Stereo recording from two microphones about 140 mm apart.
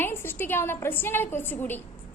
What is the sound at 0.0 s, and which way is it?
A woman's voice, 15° left (ahead or behind).